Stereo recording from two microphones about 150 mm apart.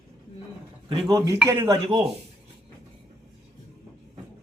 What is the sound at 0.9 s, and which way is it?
Speech, 35° right (ahead or behind).